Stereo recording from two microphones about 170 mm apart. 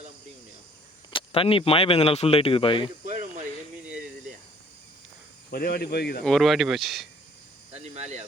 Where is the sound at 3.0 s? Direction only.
50° right (ahead or behind).